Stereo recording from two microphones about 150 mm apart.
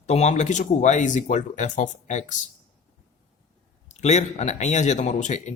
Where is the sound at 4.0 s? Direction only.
50° left (ahead or behind).